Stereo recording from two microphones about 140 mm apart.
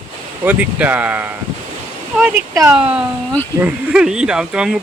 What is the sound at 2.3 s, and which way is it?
Speech, 20° right (ahead or behind).